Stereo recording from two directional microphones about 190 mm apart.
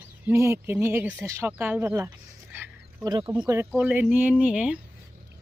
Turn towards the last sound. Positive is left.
turn(degrees=-5)  # may be behind; listen again after turning